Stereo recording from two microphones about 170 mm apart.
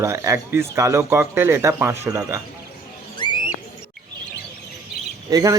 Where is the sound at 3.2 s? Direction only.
25° left (ahead or behind).